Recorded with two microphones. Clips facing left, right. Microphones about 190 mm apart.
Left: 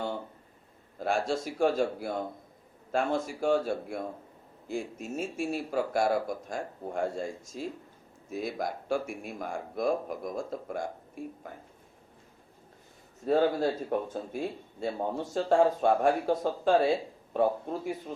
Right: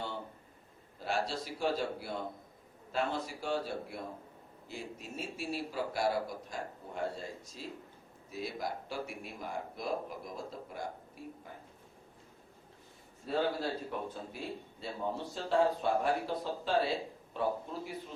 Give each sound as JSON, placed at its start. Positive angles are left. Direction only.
{"t": 0.9, "sound": "speech", "side_deg": 50}
{"t": 13.2, "sound": "speech", "side_deg": 45}